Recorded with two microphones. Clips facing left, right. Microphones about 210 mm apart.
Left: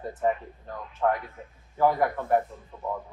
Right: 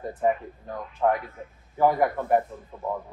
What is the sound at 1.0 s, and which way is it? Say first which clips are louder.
A man's voice: right 2 dB; 15° right (ahead or behind).